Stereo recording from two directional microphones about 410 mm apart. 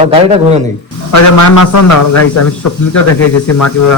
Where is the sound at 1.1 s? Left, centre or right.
Left.